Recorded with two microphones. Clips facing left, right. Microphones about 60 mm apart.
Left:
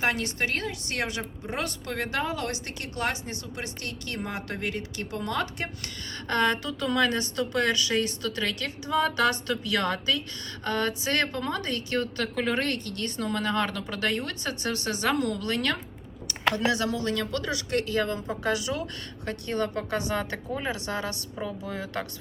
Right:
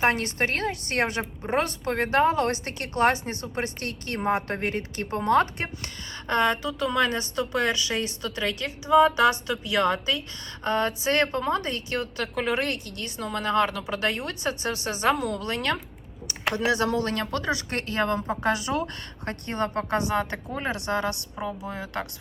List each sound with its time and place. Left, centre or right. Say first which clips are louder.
0.0 s a woman's voice: right 4 dB; right
6.2 s a woman's voice: right 2 dB; right
11.9 s a woman's voice: left 2 dB; centre
16.2 s a sound: even; right
16.8 s a woman's voice: right 3 dB; right
21.3 s a woman's voice: right 1 dB; centre